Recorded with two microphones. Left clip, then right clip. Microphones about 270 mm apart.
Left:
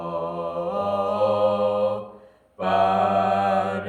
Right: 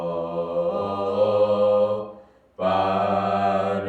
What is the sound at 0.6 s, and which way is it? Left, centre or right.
Mantra, centre.